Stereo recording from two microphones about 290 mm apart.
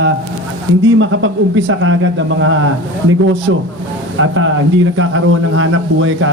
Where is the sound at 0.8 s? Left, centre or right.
Right.